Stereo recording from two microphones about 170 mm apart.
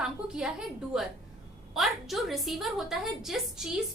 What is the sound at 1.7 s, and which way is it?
A woman's voice, centre (ahead or behind).